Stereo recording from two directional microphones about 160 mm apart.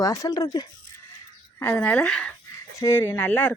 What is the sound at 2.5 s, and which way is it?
Speech, 20° left (ahead or behind).